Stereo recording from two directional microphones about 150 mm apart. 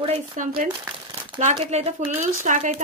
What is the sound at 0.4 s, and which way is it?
Speech, 55° right (ahead or behind).